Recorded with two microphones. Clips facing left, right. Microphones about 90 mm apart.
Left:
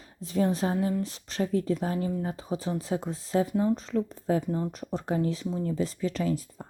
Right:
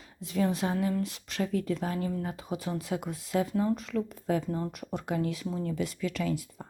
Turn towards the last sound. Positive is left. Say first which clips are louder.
# left 3 dB
turn(degrees=35)  # may be behind; listen again after turning